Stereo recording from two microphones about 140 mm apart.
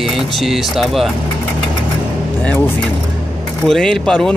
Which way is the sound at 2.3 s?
15° left (ahead or behind).